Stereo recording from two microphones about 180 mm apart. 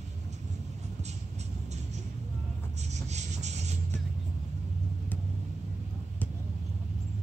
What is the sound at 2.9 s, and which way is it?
Music, 40° right (ahead or behind).